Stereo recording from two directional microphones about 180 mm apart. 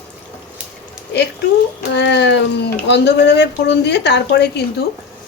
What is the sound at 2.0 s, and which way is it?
A woman's voice, 75° left (ahead or behind).